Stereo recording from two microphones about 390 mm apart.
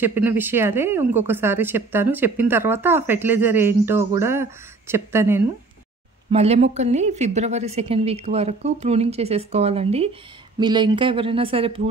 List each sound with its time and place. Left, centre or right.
0.0 s a woman's voice: centre